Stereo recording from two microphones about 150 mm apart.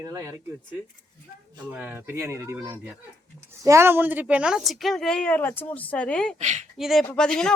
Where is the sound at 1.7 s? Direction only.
10° right (ahead or behind); by 6.3 s 5° left (ahead or behind).